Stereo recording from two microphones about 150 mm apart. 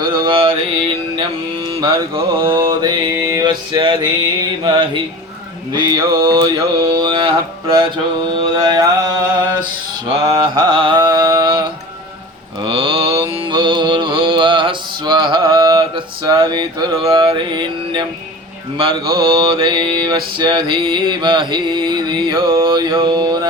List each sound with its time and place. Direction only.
0.0 s mantra: 30° right (ahead or behind)
10.5 s a sound: 35° right (ahead or behind)
12.6 s mantra: 35° right (ahead or behind)